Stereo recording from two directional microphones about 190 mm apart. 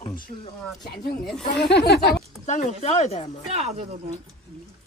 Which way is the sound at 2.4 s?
35° left (ahead or behind).